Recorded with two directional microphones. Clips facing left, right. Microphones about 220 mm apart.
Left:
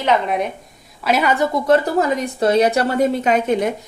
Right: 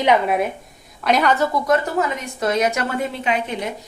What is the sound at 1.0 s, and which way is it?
Speech, 5° left (ahead or behind).